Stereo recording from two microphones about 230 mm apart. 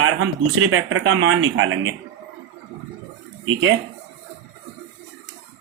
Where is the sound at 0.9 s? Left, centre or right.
Right.